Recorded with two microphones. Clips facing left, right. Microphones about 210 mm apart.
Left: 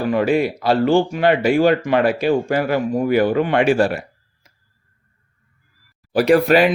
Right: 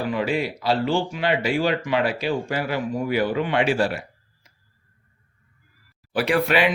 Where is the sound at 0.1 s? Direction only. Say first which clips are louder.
Left 7 dB; 50° left (ahead or behind).